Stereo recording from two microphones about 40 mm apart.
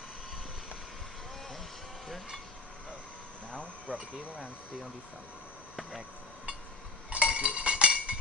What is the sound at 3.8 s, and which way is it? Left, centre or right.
Speech, right.